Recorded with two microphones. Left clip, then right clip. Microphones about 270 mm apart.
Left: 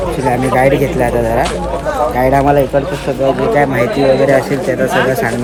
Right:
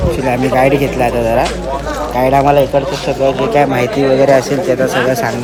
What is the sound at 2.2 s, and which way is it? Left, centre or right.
Speech, centre.